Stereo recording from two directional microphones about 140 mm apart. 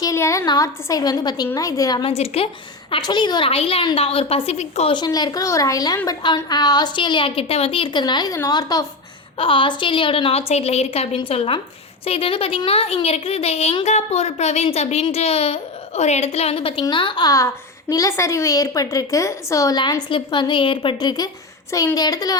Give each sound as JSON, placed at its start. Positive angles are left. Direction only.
{"t": 0.0, "sound": "a child's voice", "side_deg": 20}
{"t": 2.0, "sound": "a woman's voice", "side_deg": 45}
{"t": 2.9, "sound": "a woman's voice", "side_deg": 35}
{"t": 4.9, "sound": "a child's voice", "side_deg": 30}
{"t": 9.4, "sound": "a woman's voice", "side_deg": 40}